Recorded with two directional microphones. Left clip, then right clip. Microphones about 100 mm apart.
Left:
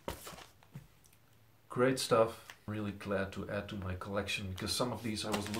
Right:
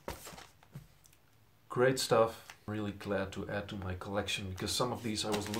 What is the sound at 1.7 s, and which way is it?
Speech, 15° right (ahead or behind).